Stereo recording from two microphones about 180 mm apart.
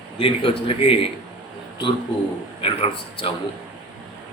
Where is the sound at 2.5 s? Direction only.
30° left (ahead or behind).